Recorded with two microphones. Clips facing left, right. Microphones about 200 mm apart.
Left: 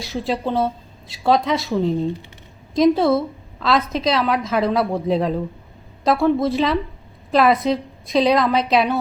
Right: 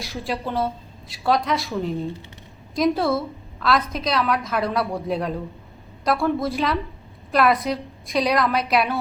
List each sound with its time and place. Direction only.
0.0 s a woman's voice: 25° left (ahead or behind)
2.7 s a woman's voice: 25° left (ahead or behind)